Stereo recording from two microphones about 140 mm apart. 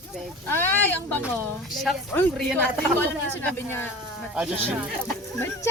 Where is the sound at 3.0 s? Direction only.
15° left (ahead or behind).